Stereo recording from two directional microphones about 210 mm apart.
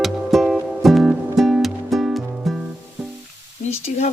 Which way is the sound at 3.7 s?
30° left (ahead or behind).